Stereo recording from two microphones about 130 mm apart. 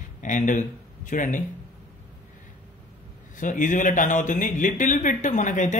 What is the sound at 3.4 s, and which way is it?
Speech, 85° left.